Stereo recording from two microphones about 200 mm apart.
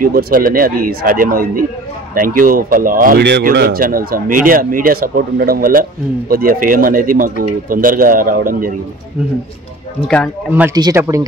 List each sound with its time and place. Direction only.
0.0 s speech: 45° right (ahead or behind)
10.0 s speech: 5° left (ahead or behind)
10.5 s speech: 10° right (ahead or behind)